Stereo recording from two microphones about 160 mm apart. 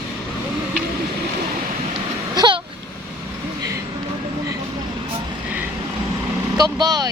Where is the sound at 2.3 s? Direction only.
25° right (ahead or behind).